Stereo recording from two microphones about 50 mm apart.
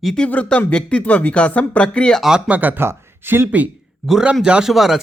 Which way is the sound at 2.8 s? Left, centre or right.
Right.